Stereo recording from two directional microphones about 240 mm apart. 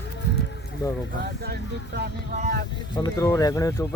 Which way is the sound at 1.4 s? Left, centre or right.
Right.